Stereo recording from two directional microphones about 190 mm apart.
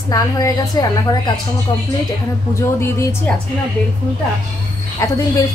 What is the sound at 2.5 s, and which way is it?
Speech, 15° left (ahead or behind).